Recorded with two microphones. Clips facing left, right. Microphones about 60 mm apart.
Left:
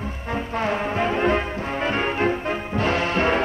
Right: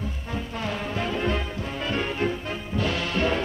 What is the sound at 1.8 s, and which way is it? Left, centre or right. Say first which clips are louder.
Music: left 4 dB; left.